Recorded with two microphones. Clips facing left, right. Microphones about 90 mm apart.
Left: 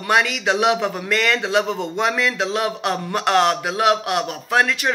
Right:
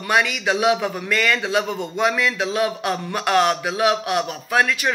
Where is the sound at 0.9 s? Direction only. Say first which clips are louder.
Left 1 dB; 55° left (ahead or behind).